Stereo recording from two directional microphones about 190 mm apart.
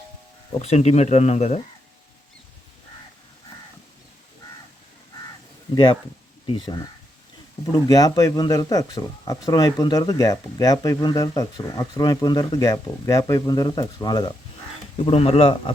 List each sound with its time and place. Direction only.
0.6 s speech: 35° left (ahead or behind)
5.7 s speech: 25° left (ahead or behind)